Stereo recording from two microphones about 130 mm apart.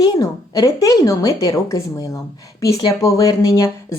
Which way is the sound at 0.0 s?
30° left (ahead or behind).